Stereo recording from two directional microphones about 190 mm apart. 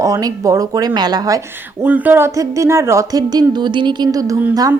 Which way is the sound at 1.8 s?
10° right (ahead or behind).